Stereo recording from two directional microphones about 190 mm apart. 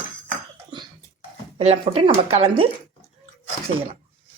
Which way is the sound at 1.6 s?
30° right (ahead or behind).